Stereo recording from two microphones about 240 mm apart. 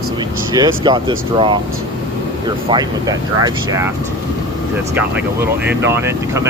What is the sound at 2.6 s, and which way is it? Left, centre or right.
Speech, centre.